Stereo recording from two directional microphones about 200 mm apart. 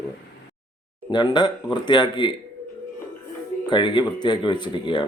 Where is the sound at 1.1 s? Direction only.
20° left (ahead or behind).